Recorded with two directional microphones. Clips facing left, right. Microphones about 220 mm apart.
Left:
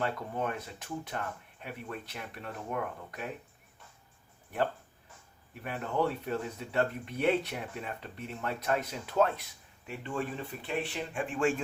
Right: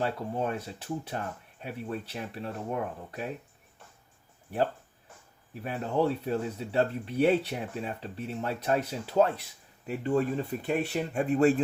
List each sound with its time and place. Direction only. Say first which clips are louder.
0.0 s speech: right 3 dB; 30° right (ahead or behind)
5.6 s speech: right 4 dB; 30° right (ahead or behind)